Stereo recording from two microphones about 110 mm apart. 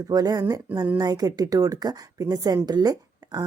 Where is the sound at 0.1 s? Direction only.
35° right (ahead or behind).